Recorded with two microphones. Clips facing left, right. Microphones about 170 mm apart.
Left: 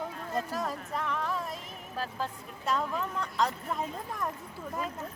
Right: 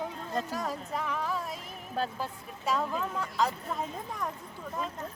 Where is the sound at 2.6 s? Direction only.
Centre (ahead or behind).